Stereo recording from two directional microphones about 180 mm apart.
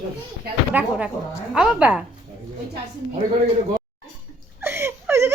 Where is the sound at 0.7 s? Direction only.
5° right (ahead or behind).